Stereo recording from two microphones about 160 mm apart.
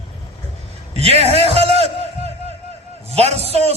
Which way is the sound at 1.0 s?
40° right (ahead or behind).